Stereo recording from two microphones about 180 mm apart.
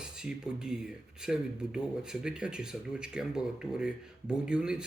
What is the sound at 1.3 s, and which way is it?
Speech, 5° right (ahead or behind).